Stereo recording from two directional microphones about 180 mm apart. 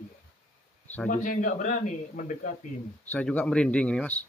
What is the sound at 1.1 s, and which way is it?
Speech, 45° left (ahead or behind).